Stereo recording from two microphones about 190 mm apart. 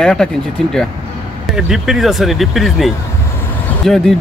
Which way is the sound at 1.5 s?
Centre (ahead or behind).